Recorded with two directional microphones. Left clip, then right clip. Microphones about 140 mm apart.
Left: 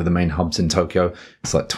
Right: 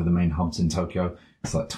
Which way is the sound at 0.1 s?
30° left (ahead or behind).